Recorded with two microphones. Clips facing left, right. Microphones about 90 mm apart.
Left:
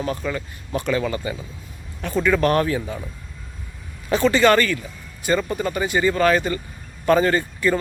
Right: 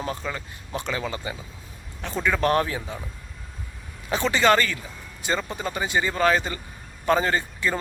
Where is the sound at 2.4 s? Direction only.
20° right (ahead or behind).